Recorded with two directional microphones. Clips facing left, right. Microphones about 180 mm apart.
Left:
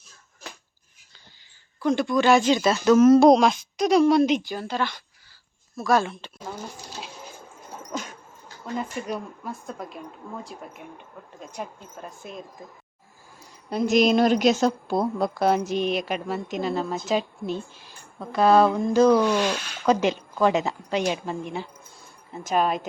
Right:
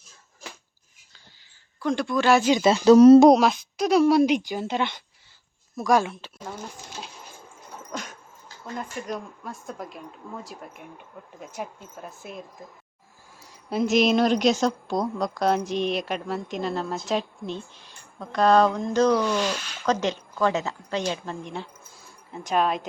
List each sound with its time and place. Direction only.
1.8 s a woman's voice: centre (ahead or behind)
2.6 s speech: 25° right (ahead or behind)
3.2 s a woman's voice: 10° right (ahead or behind)
7.8 s dog: centre (ahead or behind)
8.6 s a woman's voice: 5° left (ahead or behind)
13.7 s a woman's voice: centre (ahead or behind)